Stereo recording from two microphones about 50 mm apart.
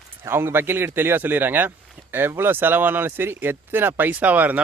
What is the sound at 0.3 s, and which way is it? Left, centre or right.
Speech, right.